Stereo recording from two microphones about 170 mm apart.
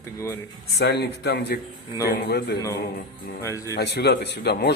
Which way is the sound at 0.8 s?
80° left.